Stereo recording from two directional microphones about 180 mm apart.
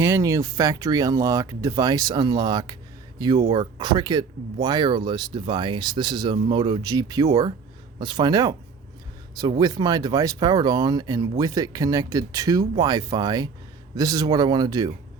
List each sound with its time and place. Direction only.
0.0 s speech: 15° right (ahead or behind)